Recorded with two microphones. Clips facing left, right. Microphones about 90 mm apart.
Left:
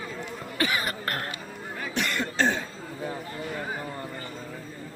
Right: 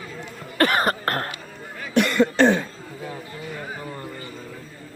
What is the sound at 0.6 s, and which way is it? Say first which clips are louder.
Cough: right 8 dB; 50° right (ahead or behind).